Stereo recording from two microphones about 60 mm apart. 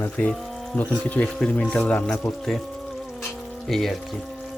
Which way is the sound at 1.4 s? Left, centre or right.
Centre.